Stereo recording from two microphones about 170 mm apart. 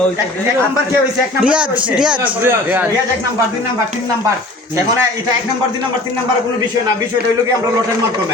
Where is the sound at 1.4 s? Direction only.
5° right (ahead or behind).